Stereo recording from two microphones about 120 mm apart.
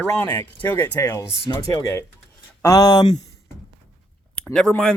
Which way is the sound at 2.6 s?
30° left (ahead or behind).